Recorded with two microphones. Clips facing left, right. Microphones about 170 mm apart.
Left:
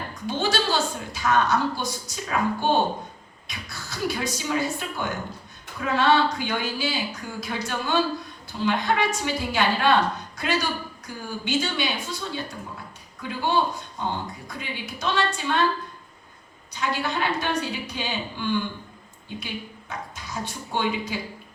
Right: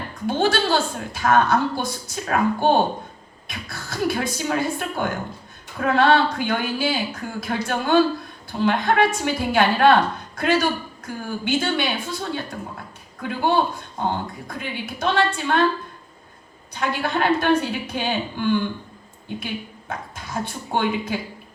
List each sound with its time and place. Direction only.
0.3 s a woman's voice: 50° right (ahead or behind)
16.7 s a woman's voice: 55° right (ahead or behind)